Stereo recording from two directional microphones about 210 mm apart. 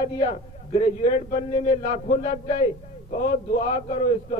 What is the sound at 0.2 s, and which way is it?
A man's voice, 30° left (ahead or behind).